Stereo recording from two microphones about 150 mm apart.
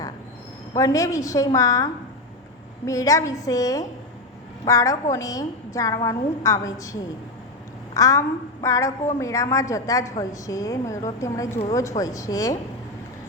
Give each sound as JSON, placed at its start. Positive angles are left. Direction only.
{"t": 0.8, "sound": "a woman's voice", "side_deg": 20}
{"t": 7.9, "sound": "a woman's voice", "side_deg": 25}